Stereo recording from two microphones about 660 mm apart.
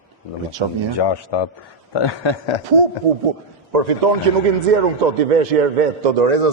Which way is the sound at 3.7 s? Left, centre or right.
Right.